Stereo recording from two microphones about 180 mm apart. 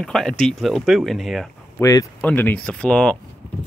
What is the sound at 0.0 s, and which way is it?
Speech, centre (ahead or behind).